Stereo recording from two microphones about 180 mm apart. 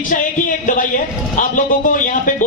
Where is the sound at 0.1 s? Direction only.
45° left (ahead or behind).